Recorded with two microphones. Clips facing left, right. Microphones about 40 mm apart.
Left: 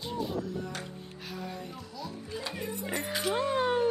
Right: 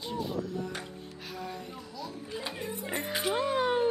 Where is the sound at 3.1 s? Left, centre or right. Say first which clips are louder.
Even; centre.